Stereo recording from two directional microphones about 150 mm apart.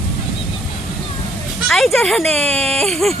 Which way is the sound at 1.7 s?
Centre (ahead or behind).